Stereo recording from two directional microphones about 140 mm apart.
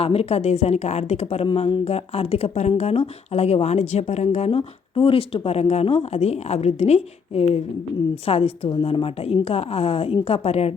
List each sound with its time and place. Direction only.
0.0 s speech: 45° left (ahead or behind)